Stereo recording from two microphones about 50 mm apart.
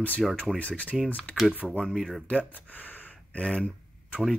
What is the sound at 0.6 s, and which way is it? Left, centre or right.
Speech, left.